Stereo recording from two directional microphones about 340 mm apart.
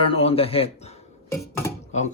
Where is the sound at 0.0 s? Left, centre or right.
Centre.